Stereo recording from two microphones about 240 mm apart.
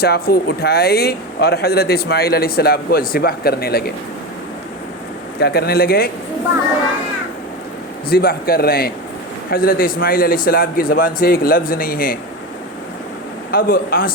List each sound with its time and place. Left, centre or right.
0.0 s speech: left
5.4 s speech: left
8.1 s speech: left
13.5 s speech: left